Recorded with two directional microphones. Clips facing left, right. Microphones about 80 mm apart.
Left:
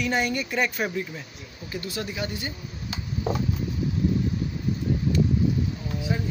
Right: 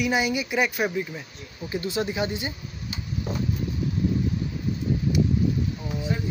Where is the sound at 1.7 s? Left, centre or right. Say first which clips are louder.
Right 5 dB; right.